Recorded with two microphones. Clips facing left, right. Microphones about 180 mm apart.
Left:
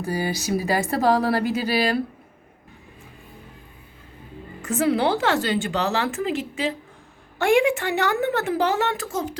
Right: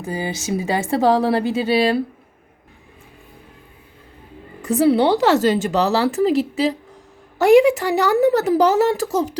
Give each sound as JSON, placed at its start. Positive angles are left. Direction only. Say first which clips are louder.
{"t": 0.0, "sound": "a woman's voice", "louder": "even", "side_deg": -20}
{"t": 4.6, "sound": "speech", "louder": "right 6 dB", "side_deg": -35}